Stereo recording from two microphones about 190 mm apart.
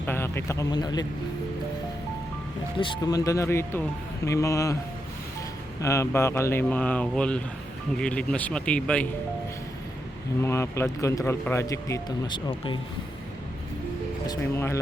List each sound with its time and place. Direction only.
0.0 s speech: 10° left (ahead or behind)
2.7 s speech: 25° left (ahead or behind)
5.8 s speech: 15° left (ahead or behind)
10.4 s speech: 15° left (ahead or behind)
14.3 s speech: 15° left (ahead or behind)